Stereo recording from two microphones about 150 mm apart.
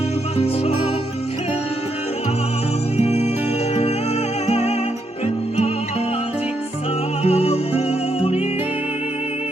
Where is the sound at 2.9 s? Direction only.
45° left (ahead or behind).